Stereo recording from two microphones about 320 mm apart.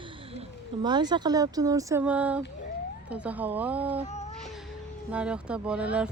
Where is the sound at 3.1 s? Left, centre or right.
Centre.